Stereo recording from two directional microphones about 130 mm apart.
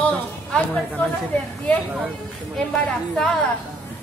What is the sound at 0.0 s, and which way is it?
A woman's voice, 10° left (ahead or behind).